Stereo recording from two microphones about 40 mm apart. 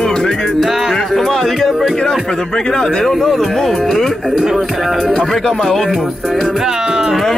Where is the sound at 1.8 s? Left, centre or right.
Centre.